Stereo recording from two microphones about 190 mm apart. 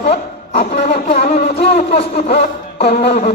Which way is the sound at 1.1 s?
35° left (ahead or behind).